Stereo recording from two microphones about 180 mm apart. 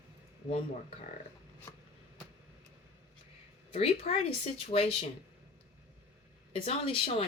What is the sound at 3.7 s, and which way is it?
A woman's voice, 30° left (ahead or behind).